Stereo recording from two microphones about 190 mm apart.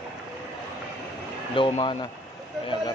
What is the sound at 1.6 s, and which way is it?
Speech, 25° left (ahead or behind).